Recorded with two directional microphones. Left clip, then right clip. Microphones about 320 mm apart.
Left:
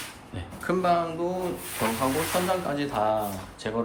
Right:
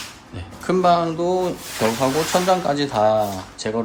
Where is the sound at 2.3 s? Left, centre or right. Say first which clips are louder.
Right 8 dB; centre.